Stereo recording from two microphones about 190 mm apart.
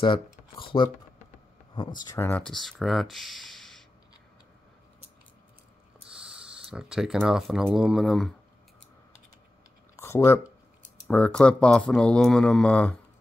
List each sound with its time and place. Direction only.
0.0 s speech: 25° left (ahead or behind)
2.2 s speech: 5° left (ahead or behind)
5.9 s speech: 5° right (ahead or behind)
9.9 s speech: 15° left (ahead or behind)